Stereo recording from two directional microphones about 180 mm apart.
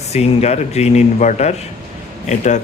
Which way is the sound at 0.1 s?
35° left (ahead or behind).